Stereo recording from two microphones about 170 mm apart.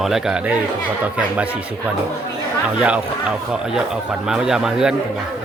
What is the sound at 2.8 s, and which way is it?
Speech, 5° right (ahead or behind).